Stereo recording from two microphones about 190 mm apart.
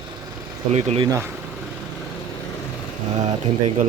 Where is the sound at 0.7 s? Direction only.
35° right (ahead or behind).